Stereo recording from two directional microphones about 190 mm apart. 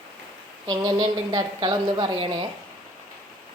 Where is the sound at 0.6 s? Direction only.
20° right (ahead or behind).